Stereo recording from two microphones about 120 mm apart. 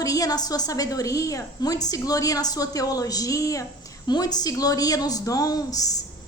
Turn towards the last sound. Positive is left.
turn(degrees=30)  # may be behind; listen again after turning